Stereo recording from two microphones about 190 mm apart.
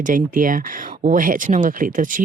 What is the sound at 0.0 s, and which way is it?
Speech, 45° right (ahead or behind).